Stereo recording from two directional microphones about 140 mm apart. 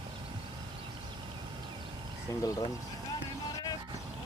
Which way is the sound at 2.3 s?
25° left (ahead or behind).